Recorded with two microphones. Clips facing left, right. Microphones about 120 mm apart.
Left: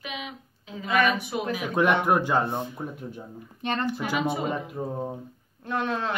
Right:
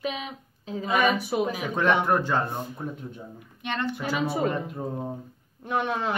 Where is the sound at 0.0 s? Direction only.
35° right (ahead or behind).